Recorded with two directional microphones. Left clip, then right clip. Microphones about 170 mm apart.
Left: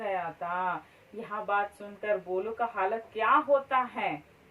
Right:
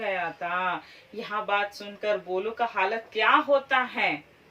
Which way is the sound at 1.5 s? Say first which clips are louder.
Right 1 dB; 15° right (ahead or behind).